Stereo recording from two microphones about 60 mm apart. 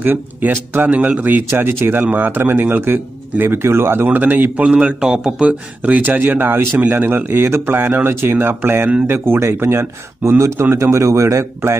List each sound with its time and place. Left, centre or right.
0.0 s speech: right
1.6 s speech: right
4.6 s speech: centre; by 11.4 s right